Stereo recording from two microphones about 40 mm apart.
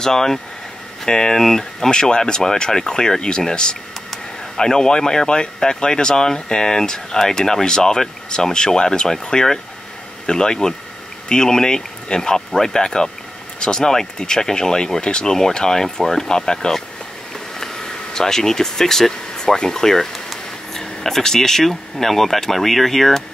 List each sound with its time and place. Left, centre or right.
0.0 s speech: centre
17.6 s air conditioning: centre
20.8 s speech: centre